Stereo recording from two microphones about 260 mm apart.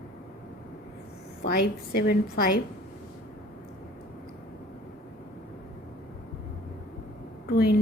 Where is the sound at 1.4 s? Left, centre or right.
Left.